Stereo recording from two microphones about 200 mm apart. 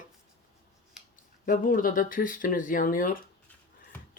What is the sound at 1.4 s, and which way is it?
Speech, 45° left (ahead or behind).